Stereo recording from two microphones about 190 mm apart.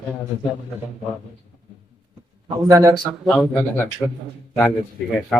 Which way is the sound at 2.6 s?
15° right (ahead or behind).